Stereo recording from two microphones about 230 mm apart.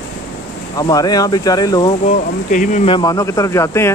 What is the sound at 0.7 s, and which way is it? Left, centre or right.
Speech, centre.